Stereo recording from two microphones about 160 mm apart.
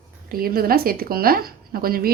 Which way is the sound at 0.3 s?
65° right (ahead or behind).